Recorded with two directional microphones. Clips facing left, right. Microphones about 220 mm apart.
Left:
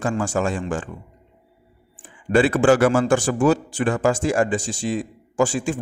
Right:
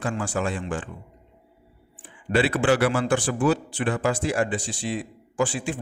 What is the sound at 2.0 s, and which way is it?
Speech, 45° left (ahead or behind).